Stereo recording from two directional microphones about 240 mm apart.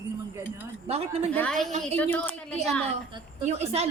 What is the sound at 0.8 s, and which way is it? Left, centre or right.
Speech, right.